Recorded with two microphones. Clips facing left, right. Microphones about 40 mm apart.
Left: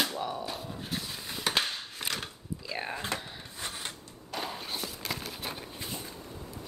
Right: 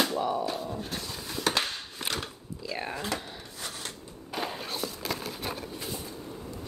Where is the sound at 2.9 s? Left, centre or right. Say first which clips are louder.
Right 1 dB; left.